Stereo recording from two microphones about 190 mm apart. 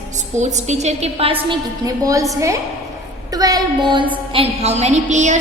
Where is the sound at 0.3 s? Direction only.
40° right (ahead or behind).